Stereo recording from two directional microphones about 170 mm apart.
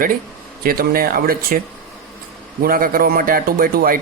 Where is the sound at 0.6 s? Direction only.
60° right (ahead or behind).